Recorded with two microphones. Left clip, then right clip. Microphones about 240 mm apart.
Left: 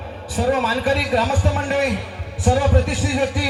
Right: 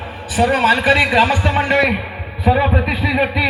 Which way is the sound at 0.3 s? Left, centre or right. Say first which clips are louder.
Right 6 dB; left.